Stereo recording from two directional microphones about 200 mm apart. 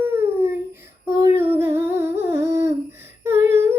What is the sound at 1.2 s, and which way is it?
Humming, 10° right (ahead or behind).